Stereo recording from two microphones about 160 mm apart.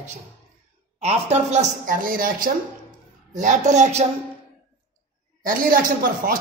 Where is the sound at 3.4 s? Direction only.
50° right (ahead or behind).